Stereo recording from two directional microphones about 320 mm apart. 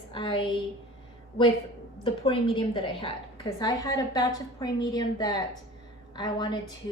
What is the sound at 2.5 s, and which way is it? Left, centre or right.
A woman's voice, centre.